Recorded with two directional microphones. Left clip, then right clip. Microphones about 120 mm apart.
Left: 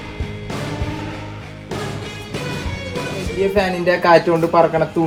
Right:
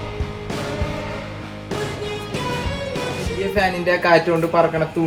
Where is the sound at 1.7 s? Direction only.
Centre (ahead or behind).